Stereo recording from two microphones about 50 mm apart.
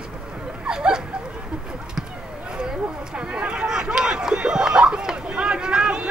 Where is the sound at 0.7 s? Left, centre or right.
Centre.